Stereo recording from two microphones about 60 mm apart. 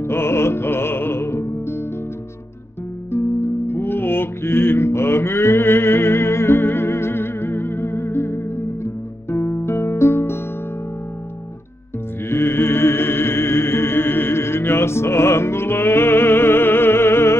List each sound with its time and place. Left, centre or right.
0.0 s music: left
3.1 s music: left
12.3 s music: left